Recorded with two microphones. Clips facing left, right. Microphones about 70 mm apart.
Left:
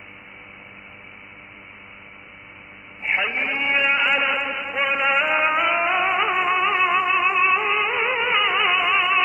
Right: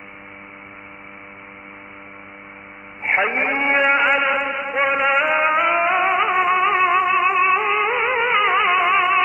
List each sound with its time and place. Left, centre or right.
3.1 s a sound: right
4.1 s chant: centre
8.6 s music: centre